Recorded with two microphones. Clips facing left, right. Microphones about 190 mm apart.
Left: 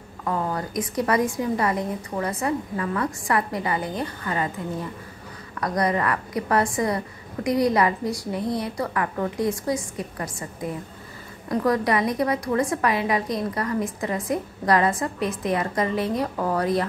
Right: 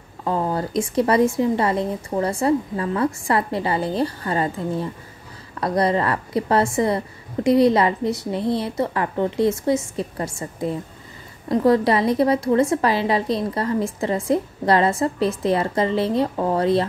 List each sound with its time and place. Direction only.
0.2 s a woman's voice: 25° right (ahead or behind)